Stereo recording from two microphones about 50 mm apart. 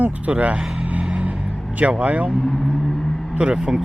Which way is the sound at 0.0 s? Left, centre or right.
Right.